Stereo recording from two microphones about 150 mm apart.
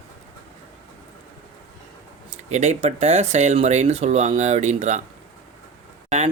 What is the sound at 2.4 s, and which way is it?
Speech, 50° right (ahead or behind).